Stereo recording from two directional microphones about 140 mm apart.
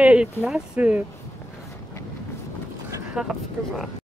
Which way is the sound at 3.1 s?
Centre (ahead or behind).